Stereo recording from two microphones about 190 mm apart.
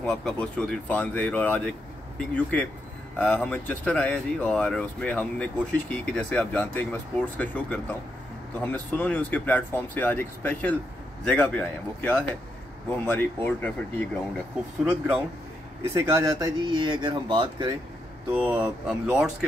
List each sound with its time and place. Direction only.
0.0 s speech: 5° left (ahead or behind)
15.9 s speech: 15° right (ahead or behind)
18.4 s speech: 10° right (ahead or behind)